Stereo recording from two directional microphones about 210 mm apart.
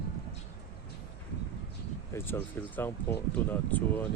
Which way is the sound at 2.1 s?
10° left (ahead or behind).